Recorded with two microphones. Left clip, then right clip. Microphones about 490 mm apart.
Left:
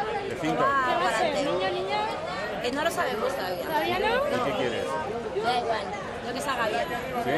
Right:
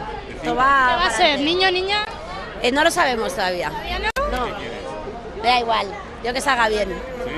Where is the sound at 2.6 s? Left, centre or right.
Right.